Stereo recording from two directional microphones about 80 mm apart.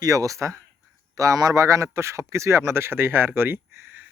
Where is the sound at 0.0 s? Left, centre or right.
Right.